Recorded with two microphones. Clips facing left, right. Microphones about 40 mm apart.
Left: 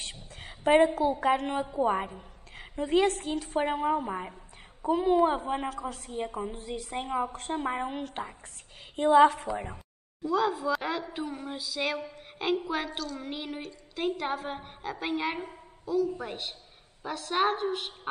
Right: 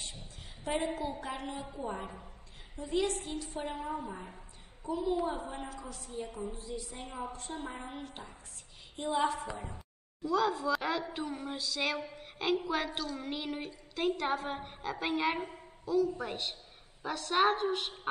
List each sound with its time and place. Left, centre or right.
0.0 s a sound: left
0.8 s a woman's voice: left
10.5 s a woman's voice: centre
11.1 s music: centre
12.2 s a sound: centre
12.6 s music: centre
12.9 s a woman's voice: centre
13.2 s music: centre
13.9 s a woman's voice: centre